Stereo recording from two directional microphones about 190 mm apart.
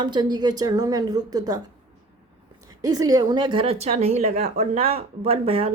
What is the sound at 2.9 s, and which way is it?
Speech, 20° right (ahead or behind).